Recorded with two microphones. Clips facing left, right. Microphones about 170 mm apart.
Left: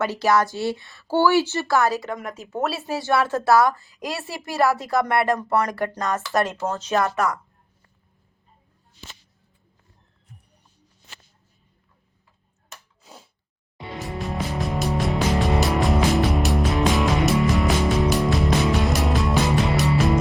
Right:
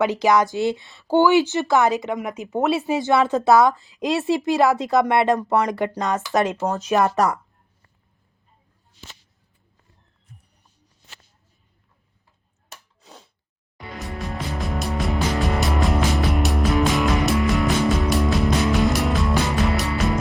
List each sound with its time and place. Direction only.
0.0 s a woman's voice: 15° right (ahead or behind)
7.2 s a woman's voice: 35° right (ahead or behind)
13.0 s a sound: centre (ahead or behind)
13.8 s music: centre (ahead or behind)